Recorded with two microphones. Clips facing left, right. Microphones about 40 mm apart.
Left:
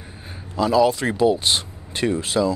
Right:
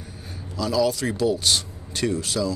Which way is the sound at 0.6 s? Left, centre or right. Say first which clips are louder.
Left 5 dB; left.